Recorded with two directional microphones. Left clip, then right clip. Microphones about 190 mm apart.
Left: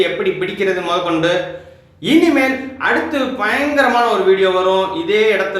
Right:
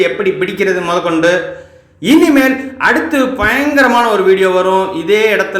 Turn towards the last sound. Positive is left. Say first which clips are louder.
# right 3 dB
turn(degrees=-30)  # may be behind; listen again after turning